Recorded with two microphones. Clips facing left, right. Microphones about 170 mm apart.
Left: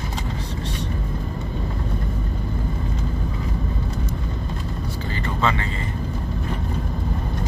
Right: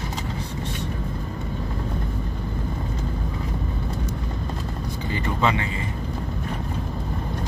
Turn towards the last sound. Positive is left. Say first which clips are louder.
# even
turn(degrees=-15)  # may be behind; listen again after turning